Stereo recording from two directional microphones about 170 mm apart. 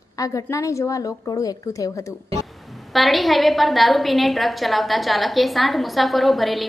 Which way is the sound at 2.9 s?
Centre (ahead or behind).